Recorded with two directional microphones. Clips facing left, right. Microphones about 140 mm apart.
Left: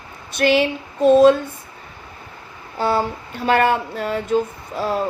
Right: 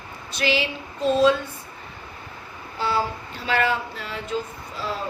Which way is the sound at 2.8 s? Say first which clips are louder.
Left 5 dB; 50° left (ahead or behind).